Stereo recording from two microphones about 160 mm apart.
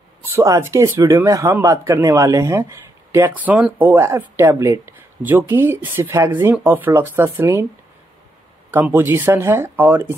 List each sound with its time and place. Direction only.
0.2 s speech: 15° right (ahead or behind)
8.7 s speech: 10° right (ahead or behind)